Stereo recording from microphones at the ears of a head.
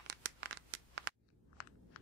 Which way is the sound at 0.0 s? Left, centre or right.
Right.